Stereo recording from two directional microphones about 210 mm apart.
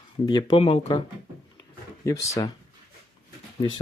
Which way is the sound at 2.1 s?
15° left (ahead or behind).